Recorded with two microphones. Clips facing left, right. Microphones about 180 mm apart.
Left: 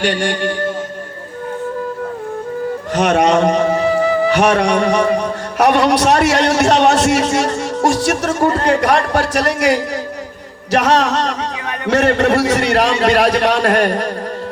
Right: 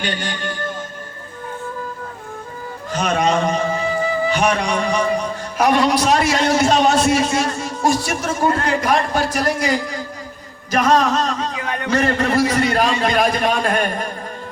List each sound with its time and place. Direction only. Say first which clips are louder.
0.0 s a man's voice: left 8 dB; 75° left (ahead or behind)
2.9 s a man's voice: left 5 dB; 75° left (ahead or behind)